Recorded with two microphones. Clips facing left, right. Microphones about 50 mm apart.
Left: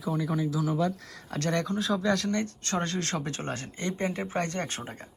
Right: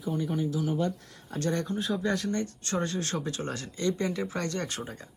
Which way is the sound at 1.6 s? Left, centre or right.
Left.